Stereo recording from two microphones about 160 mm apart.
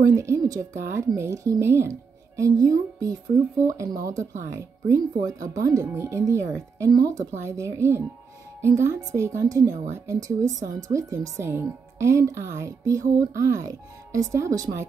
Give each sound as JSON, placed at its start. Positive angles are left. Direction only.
{"t": 0.0, "sound": "speech", "side_deg": -20}